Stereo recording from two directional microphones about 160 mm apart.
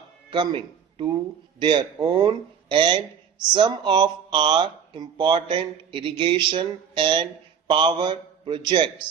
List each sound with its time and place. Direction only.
0.3 s speech: 30° right (ahead or behind)